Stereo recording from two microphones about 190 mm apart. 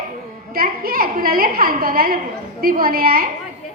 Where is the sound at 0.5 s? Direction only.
50° right (ahead or behind).